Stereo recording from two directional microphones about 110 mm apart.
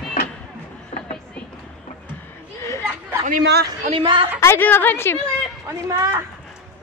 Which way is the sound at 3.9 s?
50° right (ahead or behind).